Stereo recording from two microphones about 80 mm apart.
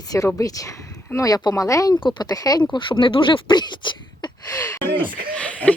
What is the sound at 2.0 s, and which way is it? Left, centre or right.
Speech, left.